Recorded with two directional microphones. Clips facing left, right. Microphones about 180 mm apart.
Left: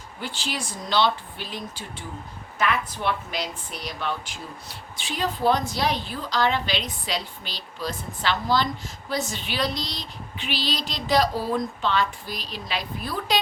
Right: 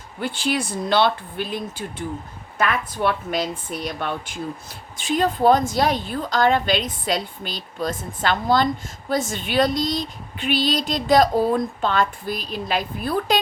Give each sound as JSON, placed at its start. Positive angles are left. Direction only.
{"t": 0.2, "sound": "a woman's voice", "side_deg": -55}